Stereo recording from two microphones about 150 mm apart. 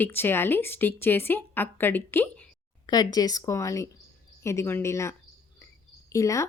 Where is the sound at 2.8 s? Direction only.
25° left (ahead or behind).